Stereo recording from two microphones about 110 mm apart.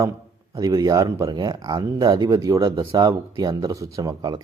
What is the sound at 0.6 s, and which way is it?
Speech, 35° right (ahead or behind).